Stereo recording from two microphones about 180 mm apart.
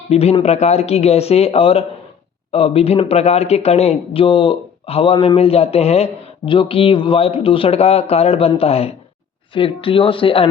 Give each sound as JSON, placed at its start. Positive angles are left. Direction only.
{"t": 0.1, "sound": "speech", "side_deg": 35}